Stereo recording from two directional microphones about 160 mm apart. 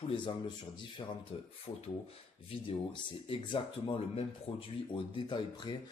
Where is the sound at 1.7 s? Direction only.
50° left (ahead or behind).